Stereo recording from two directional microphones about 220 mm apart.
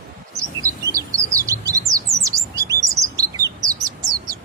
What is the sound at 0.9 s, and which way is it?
Chirp, 15° right (ahead or behind).